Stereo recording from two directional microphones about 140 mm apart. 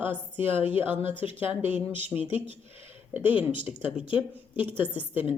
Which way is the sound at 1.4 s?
15° right (ahead or behind).